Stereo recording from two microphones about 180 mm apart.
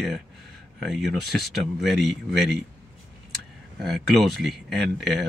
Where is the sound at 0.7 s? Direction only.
Centre (ahead or behind).